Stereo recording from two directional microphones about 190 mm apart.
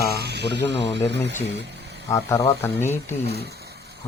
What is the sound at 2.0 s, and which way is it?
Speech, 15° left (ahead or behind).